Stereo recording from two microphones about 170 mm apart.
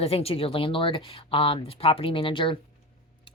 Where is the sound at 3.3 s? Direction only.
30° left (ahead or behind).